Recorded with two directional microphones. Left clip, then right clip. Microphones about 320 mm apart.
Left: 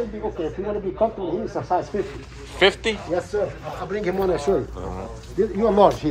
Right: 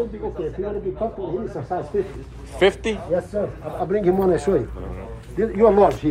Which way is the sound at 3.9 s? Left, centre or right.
Right.